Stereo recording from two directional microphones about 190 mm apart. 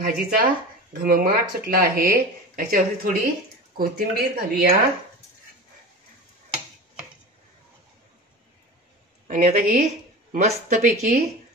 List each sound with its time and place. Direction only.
0.0 s speech: 55° right (ahead or behind)
9.3 s speech: 45° right (ahead or behind)